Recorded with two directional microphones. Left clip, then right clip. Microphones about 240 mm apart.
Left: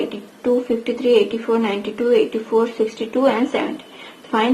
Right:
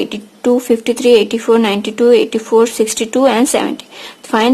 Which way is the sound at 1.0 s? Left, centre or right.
Right.